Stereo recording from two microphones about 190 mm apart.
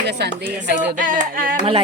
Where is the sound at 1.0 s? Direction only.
45° right (ahead or behind).